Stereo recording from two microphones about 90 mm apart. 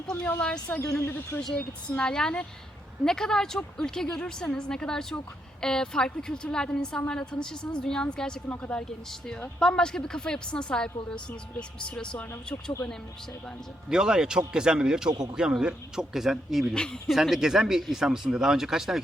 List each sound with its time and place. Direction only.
0.3 s a woman's voice: 15° left (ahead or behind)
1.4 s a woman's voice: 5° left (ahead or behind)
13.9 s speech: 10° right (ahead or behind)
15.1 s a man's voice: 50° right (ahead or behind)
15.4 s speech: 10° right (ahead or behind)
16.7 s speech: 10° left (ahead or behind)